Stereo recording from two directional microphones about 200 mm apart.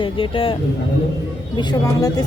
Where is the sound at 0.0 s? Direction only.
25° left (ahead or behind).